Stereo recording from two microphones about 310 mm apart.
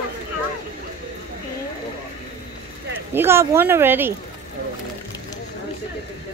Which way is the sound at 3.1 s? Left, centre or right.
Centre.